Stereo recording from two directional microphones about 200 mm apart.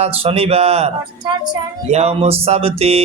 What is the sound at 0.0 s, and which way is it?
Music, 30° right (ahead or behind).